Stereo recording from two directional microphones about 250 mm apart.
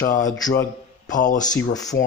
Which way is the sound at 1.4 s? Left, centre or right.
Centre.